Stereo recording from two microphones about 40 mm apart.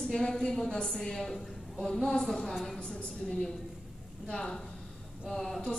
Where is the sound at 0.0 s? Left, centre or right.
Centre.